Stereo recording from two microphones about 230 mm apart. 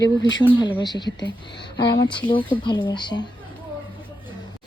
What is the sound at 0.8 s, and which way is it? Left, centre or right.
Speech, centre.